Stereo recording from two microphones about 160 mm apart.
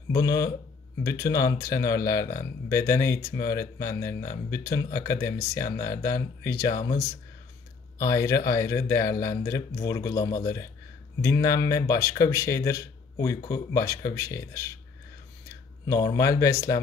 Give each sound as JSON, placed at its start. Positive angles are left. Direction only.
{"t": 0.1, "sound": "speech", "side_deg": 20}
{"t": 8.0, "sound": "speech", "side_deg": 20}
{"t": 15.9, "sound": "speech", "side_deg": 20}